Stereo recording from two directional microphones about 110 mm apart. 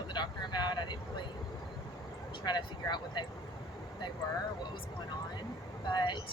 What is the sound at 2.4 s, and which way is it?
Speech, 40° left (ahead or behind).